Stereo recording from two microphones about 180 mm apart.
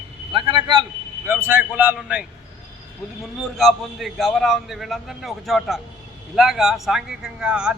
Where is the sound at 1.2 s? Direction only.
15° right (ahead or behind).